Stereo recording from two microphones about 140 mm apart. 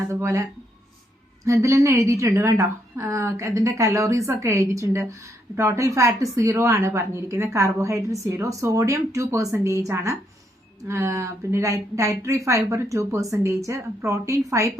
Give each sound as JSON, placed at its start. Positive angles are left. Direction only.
{"t": 0.1, "sound": "a woman's voice", "side_deg": -20}
{"t": 1.5, "sound": "a woman's voice", "side_deg": -20}